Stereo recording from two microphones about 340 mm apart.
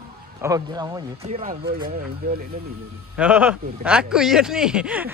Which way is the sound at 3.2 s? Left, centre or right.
Centre.